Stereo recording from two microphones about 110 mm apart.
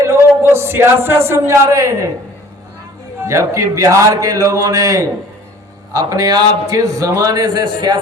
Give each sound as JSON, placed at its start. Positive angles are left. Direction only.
{"t": 0.0, "sound": "a sound", "side_deg": -25}
{"t": 1.0, "sound": "speech", "side_deg": -25}
{"t": 3.2, "sound": "a man's voice", "side_deg": -30}